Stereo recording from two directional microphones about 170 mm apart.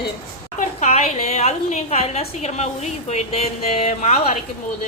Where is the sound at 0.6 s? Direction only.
40° left (ahead or behind).